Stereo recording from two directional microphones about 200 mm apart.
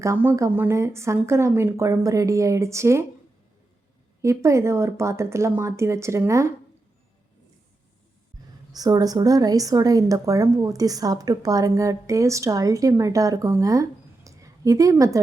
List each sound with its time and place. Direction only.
0.0 s a woman's voice: 10° right (ahead or behind)
4.2 s a woman's voice: 15° right (ahead or behind)
8.7 s a woman's voice: 20° right (ahead or behind)
14.3 s a sound: 15° right (ahead or behind)